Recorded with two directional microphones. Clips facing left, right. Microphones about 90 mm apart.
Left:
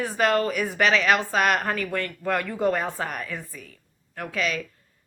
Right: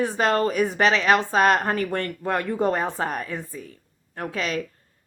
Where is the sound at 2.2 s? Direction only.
25° right (ahead or behind).